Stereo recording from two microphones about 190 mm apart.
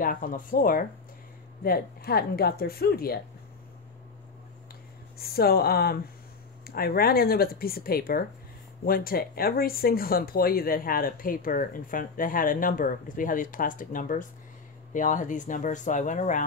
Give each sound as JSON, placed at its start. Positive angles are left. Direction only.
{"t": 0.0, "sound": "speech", "side_deg": 45}
{"t": 5.2, "sound": "a woman's voice", "side_deg": 55}